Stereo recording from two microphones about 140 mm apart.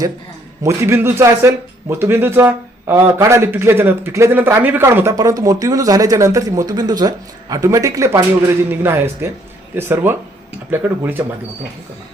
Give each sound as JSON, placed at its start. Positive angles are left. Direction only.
{"t": 0.6, "sound": "a man's voice", "side_deg": -20}